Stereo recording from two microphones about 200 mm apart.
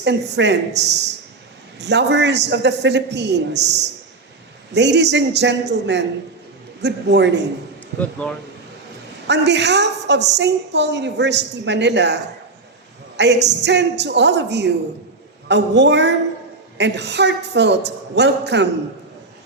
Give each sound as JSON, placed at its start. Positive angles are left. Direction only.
{"t": 0.0, "sound": "a woman's voice", "side_deg": -60}
{"t": 9.2, "sound": "a woman's voice", "side_deg": -60}